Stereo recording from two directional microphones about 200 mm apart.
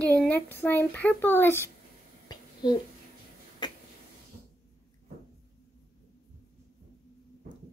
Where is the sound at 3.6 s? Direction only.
20° left (ahead or behind).